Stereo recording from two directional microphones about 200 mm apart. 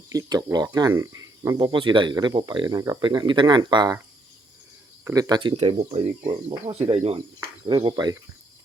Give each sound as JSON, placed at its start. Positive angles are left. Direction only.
{"t": 0.1, "sound": "speech", "side_deg": -20}
{"t": 5.0, "sound": "speech", "side_deg": -20}